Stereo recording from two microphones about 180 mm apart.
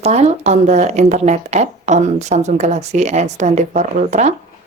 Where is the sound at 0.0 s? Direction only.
35° right (ahead or behind).